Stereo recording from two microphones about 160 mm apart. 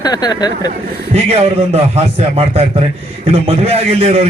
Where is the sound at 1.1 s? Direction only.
40° right (ahead or behind).